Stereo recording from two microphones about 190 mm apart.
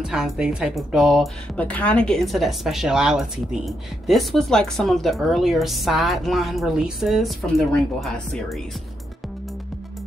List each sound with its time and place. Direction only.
0.0 s a woman's voice: 5° right (ahead or behind)